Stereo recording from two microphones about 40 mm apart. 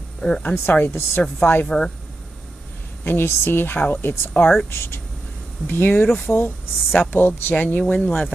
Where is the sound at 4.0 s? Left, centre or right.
Left.